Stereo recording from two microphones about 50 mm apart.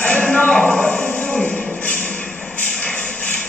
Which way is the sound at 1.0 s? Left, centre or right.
Left.